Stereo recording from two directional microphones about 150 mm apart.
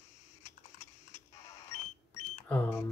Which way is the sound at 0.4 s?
20° left (ahead or behind).